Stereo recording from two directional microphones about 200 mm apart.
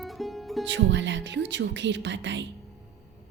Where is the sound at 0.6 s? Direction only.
65° right (ahead or behind).